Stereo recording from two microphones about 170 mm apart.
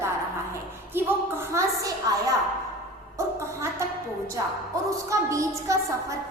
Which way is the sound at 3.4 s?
15° right (ahead or behind).